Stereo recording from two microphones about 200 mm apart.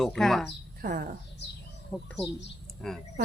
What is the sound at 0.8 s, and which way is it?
Speech, 40° right (ahead or behind).